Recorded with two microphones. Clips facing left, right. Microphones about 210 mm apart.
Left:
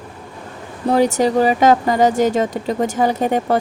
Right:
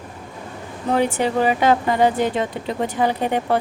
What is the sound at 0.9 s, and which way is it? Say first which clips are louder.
Speech: left 4 dB; 40° left (ahead or behind).